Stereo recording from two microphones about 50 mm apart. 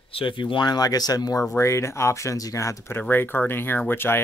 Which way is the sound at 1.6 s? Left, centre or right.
Left.